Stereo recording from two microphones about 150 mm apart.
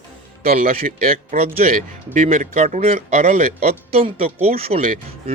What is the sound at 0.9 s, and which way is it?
Speech, 70° right (ahead or behind).